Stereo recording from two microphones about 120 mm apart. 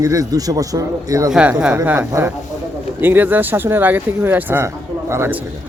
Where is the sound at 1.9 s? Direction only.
20° right (ahead or behind).